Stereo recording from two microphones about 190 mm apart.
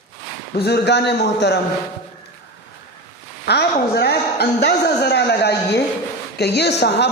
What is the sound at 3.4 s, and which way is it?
A man's voice, 60° left (ahead or behind).